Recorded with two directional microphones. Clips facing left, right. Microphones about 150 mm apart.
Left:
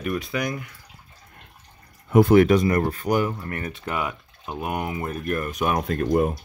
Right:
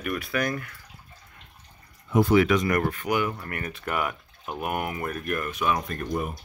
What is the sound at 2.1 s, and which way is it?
Speech, 55° left (ahead or behind).